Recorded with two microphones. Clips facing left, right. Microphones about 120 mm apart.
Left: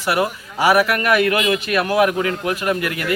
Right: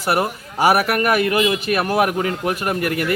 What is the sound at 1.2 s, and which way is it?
Speech, 25° right (ahead or behind).